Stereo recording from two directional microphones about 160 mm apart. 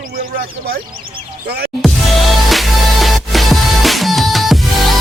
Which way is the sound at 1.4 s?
80° right.